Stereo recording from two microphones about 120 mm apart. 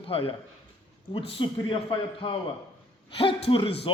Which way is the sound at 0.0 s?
50° left (ahead or behind).